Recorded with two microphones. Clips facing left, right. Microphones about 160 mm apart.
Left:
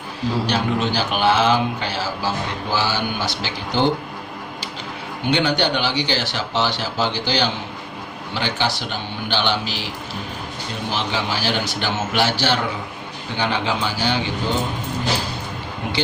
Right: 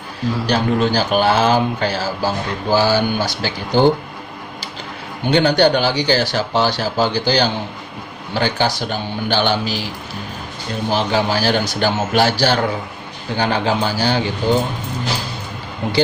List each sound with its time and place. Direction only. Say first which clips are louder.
0.4 s a man's voice: right 7 dB; 40° right (ahead or behind)
5.3 s a man's voice: right 6 dB; 40° right (ahead or behind)
10.9 s a man's voice: right 7 dB; 40° right (ahead or behind)